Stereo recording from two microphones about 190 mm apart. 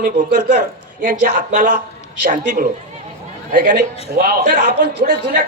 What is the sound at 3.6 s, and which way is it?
A man's voice, 65° right (ahead or behind).